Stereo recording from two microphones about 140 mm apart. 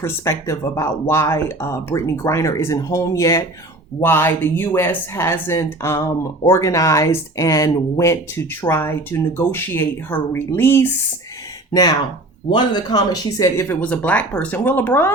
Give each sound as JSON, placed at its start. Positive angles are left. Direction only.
{"t": 0.0, "sound": "speech", "side_deg": 20}
{"t": 11.7, "sound": "speech", "side_deg": 30}
{"t": 13.4, "sound": "speech", "side_deg": 20}